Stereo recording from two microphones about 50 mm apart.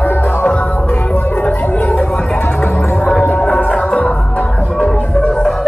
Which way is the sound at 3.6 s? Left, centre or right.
Left.